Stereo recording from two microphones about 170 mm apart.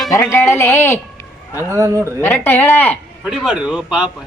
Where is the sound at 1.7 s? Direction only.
15° right (ahead or behind).